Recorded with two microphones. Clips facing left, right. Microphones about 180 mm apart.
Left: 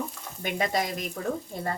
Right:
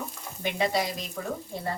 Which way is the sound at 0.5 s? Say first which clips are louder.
Right 1 dB; 50° left (ahead or behind).